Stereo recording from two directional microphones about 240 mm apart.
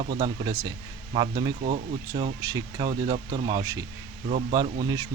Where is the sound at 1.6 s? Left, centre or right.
Right.